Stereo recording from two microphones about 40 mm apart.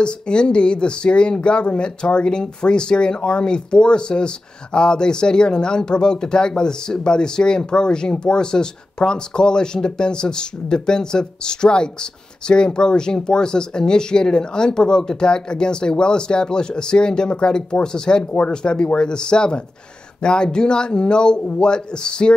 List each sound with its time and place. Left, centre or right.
0.0 s speech: left